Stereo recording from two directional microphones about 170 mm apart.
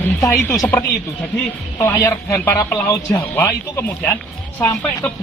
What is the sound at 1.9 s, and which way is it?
Speech, 15° left (ahead or behind).